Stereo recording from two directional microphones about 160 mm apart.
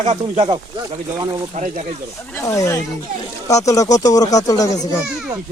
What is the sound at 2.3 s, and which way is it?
Speech, 20° left (ahead or behind).